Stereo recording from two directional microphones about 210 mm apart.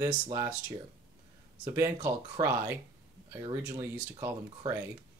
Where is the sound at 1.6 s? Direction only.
15° right (ahead or behind).